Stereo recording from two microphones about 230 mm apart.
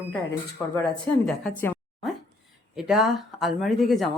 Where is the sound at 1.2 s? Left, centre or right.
Centre.